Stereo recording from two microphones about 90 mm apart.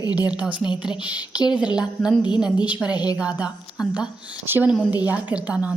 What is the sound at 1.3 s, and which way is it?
Speech, 50° left (ahead or behind).